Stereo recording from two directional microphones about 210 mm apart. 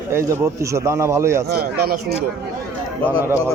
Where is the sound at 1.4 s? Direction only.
50° right (ahead or behind).